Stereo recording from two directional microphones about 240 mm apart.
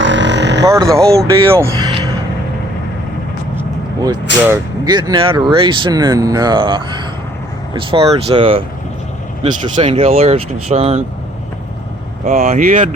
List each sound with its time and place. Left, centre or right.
0.0 s vehicle: right
0.6 s speech: centre
3.5 s vehicle: centre
4.4 s speech: centre
12.2 s speech: right